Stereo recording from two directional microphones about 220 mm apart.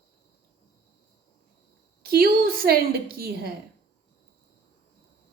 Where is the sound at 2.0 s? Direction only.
40° right (ahead or behind).